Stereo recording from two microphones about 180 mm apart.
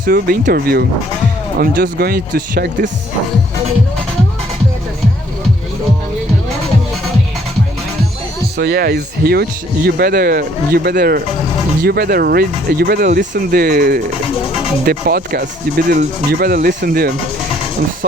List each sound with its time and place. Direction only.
0.0 s speech: 55° right (ahead or behind)
8.5 s speech: 65° right (ahead or behind)